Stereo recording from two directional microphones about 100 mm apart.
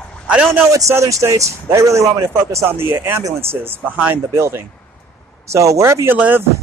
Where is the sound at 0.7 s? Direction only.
30° right (ahead or behind).